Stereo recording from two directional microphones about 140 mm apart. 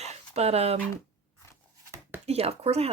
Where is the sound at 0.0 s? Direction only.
50° right (ahead or behind).